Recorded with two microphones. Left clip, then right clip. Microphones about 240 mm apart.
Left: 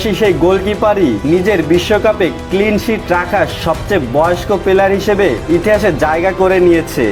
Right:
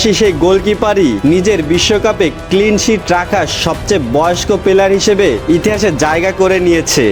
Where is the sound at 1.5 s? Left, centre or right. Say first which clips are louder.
Even; right.